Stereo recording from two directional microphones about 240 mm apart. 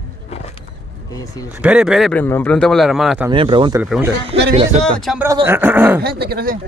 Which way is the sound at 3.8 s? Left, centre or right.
Centre.